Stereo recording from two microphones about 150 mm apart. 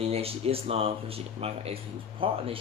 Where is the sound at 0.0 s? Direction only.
40° right (ahead or behind).